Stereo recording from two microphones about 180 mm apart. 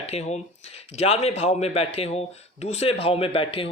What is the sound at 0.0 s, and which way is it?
A man's voice, 35° left (ahead or behind).